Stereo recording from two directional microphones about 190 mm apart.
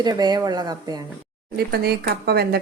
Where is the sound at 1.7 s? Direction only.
55° right (ahead or behind).